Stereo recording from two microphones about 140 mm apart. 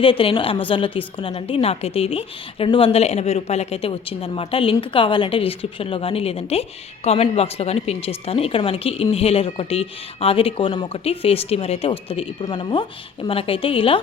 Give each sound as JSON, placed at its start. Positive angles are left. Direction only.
{"t": 0.0, "sound": "a woman's voice", "side_deg": 40}